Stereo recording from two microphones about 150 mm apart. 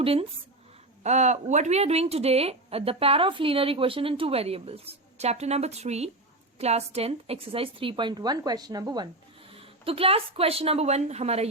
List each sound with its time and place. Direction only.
0.0 s a woman's voice: 40° right (ahead or behind)
1.0 s a woman's voice: 50° right (ahead or behind); by 9.0 s 25° right (ahead or behind)
9.6 s a woman's voice: 40° right (ahead or behind)